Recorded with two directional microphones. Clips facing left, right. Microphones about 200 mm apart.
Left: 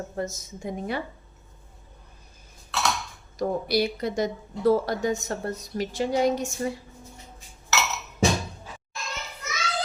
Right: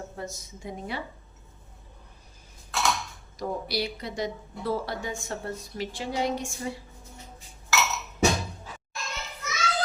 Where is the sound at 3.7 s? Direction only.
50° left (ahead or behind).